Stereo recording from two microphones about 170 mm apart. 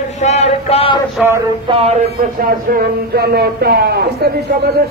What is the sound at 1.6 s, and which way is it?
Speech, 35° right (ahead or behind).